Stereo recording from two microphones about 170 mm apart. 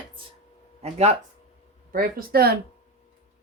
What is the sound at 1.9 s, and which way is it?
Speech, 60° right (ahead or behind).